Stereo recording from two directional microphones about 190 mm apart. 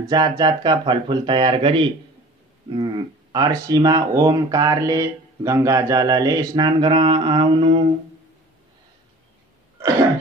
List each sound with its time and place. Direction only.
0.1 s speech: 20° right (ahead or behind)